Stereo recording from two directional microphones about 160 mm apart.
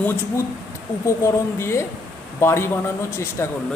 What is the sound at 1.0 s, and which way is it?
Speech, 15° left (ahead or behind).